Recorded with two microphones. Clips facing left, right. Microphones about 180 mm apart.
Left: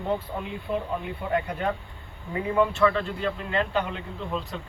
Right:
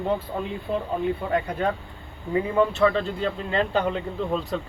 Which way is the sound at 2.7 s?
30° right (ahead or behind).